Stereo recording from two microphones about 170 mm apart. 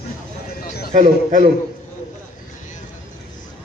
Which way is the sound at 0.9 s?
50° right (ahead or behind).